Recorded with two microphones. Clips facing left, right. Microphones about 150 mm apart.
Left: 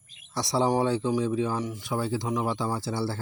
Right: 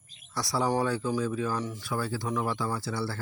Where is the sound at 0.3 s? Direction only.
25° left (ahead or behind).